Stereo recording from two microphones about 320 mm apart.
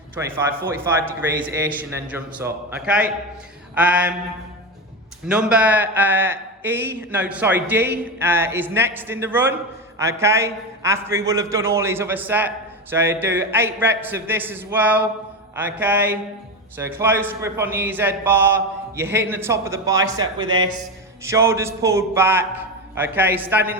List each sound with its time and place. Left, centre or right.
0.2 s a man's voice: centre
5.3 s a man's voice: centre